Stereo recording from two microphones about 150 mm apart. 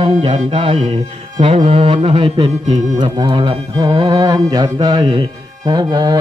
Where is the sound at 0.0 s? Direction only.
35° right (ahead or behind).